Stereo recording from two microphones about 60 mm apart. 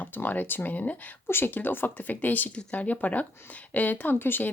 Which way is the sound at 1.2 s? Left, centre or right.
Left.